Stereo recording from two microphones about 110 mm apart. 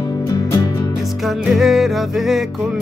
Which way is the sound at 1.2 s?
Centre (ahead or behind).